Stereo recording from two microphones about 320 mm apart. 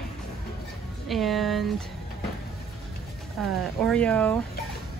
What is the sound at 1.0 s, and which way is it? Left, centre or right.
Speech, centre.